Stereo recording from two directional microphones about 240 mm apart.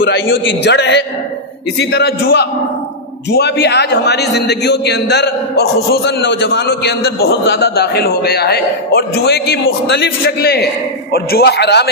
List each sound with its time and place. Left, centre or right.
0.0 s a man's voice: left